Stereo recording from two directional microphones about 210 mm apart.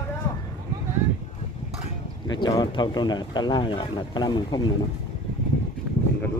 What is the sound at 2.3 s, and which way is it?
Speech, 20° left (ahead or behind).